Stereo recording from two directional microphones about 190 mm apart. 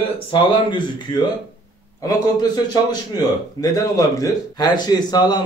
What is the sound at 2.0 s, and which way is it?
A man's voice, 20° left (ahead or behind).